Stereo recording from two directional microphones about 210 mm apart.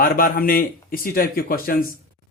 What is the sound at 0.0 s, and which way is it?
A man's voice, 45° left (ahead or behind).